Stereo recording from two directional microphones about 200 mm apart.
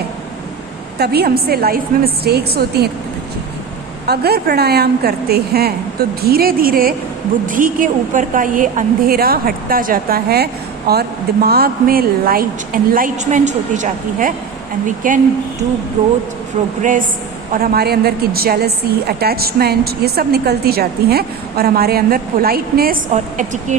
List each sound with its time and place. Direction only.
0.9 s a woman's voice: 55° right (ahead or behind)
4.0 s a woman's voice: 50° right (ahead or behind)
16.6 s a woman's voice: 30° right (ahead or behind)
17.5 s a woman's voice: 50° right (ahead or behind)
23.1 s a woman's voice: 35° right (ahead or behind)